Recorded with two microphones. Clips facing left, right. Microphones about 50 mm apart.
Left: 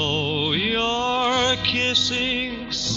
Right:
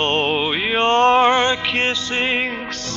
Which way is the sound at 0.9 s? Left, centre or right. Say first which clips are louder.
Right 11 dB; right.